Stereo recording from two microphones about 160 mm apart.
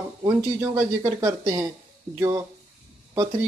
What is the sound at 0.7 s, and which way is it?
Speech, 20° right (ahead or behind).